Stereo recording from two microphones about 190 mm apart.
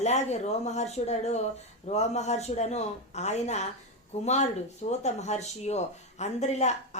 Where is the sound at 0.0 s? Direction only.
35° left (ahead or behind).